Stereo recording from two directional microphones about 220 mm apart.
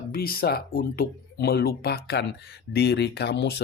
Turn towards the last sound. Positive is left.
turn(degrees=50)  # may be behind; listen again after turning